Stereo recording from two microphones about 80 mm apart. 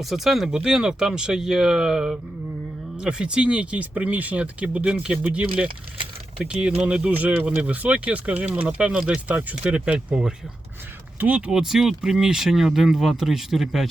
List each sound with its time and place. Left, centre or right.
0.0 s speech: centre